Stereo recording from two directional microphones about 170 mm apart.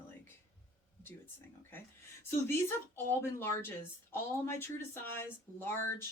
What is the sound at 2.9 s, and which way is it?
A woman's voice, 15° left (ahead or behind).